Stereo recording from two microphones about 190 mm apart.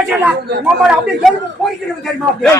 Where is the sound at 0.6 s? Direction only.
5° right (ahead or behind).